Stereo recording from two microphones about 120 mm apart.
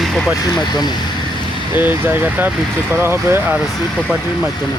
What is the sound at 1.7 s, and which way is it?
Speech, 15° right (ahead or behind).